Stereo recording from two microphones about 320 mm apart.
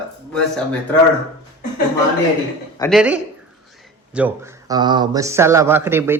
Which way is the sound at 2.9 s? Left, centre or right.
Centre.